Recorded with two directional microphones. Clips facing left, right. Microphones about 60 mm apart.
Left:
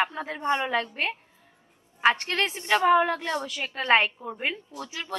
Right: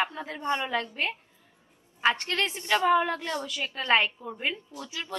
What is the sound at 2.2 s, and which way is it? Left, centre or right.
A woman's voice, left.